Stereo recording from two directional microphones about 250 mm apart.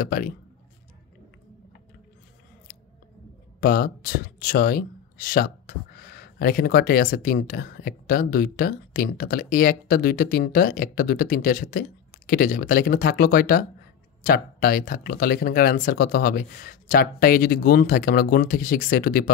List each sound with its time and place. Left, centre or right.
0.0 s speech: left
3.6 s speech: left